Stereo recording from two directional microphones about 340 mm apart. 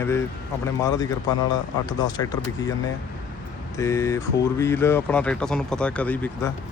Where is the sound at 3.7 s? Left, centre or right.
Centre.